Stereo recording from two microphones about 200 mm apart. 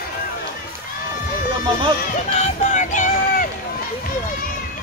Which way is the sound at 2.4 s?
40° left (ahead or behind).